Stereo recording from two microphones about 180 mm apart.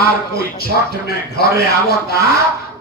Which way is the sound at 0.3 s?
60° left (ahead or behind).